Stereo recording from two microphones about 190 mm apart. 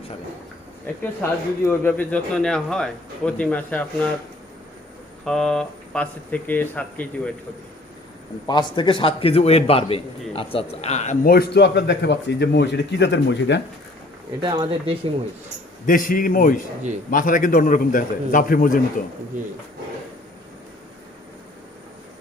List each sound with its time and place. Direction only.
1.0 s speech: 10° left (ahead or behind)
5.2 s speech: 5° left (ahead or behind)
8.4 s a man's voice: 25° left (ahead or behind); by 13.6 s 70° left (ahead or behind)
14.4 s speech: 25° right (ahead or behind)
15.9 s a man's voice: 45° left (ahead or behind)
19.3 s speech: 45° right (ahead or behind)